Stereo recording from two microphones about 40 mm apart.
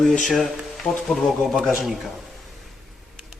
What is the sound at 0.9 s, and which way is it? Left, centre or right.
Speech, left.